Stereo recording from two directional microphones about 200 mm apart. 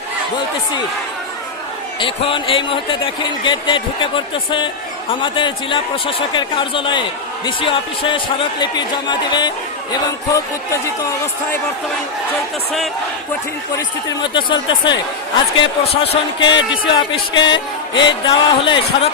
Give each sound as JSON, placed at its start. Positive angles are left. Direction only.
{"t": 2.0, "sound": "speech", "side_deg": 25}
{"t": 14.3, "sound": "speech", "side_deg": 25}
{"t": 17.4, "sound": "music", "side_deg": 20}
{"t": 18.3, "sound": "speech", "side_deg": 25}